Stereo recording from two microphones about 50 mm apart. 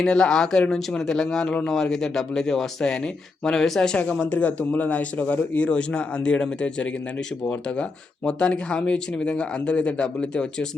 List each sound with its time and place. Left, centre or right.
0.0 s speech: centre